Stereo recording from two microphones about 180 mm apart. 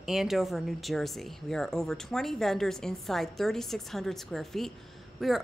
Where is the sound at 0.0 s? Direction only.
Centre (ahead or behind).